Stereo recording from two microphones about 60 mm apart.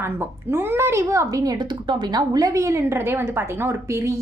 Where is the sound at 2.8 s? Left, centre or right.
Right.